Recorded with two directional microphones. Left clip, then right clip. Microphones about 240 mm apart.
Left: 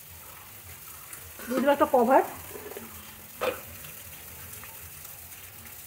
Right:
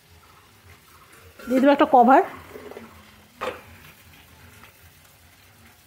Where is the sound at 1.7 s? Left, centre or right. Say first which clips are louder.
Right 6 dB; right.